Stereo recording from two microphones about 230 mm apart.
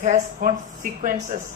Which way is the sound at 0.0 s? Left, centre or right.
Right.